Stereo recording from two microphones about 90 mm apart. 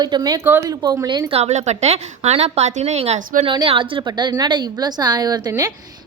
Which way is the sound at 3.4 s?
70° right (ahead or behind).